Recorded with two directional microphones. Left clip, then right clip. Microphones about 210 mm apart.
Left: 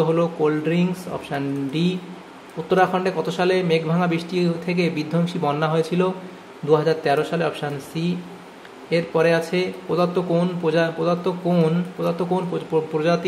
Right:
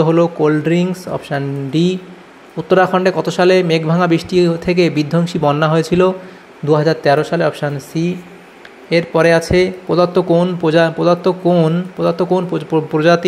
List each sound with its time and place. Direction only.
0.0 s a man's voice: 25° right (ahead or behind)